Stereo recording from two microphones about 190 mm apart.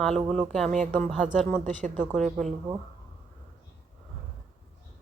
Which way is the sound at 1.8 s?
40° right (ahead or behind).